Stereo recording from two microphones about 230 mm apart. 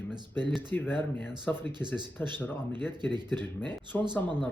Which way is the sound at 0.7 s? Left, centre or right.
Centre.